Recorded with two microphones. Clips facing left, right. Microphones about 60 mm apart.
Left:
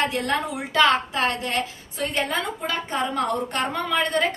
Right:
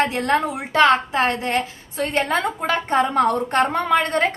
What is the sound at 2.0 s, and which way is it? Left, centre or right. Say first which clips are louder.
A woman's voice: right 5 dB; right.